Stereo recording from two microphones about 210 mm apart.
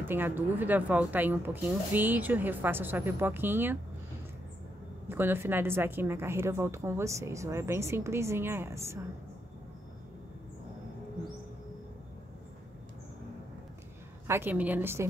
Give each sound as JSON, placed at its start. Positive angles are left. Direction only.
{"t": 0.0, "sound": "a woman's voice", "side_deg": -10}
{"t": 5.0, "sound": "a woman's voice", "side_deg": -10}
{"t": 14.2, "sound": "a woman's voice", "side_deg": -10}